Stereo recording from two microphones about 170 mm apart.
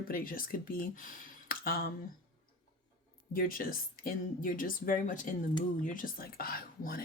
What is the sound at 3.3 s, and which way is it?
Speech, 60° left (ahead or behind).